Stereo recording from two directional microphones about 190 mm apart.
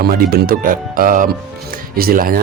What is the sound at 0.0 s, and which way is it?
Speech, 50° right (ahead or behind).